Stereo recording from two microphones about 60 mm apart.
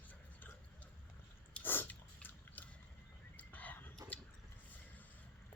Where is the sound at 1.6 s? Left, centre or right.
Left.